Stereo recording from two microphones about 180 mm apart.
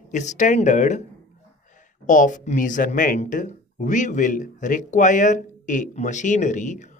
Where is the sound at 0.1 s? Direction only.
40° left (ahead or behind).